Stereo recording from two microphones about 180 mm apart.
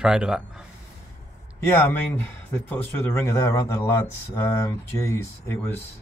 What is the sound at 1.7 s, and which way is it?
Speech, 10° left (ahead or behind).